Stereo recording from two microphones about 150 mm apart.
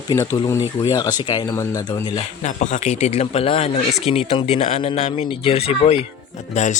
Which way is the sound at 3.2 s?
40° left (ahead or behind).